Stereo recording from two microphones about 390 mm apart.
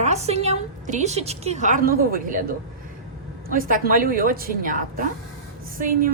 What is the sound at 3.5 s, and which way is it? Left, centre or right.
A woman's voice, right.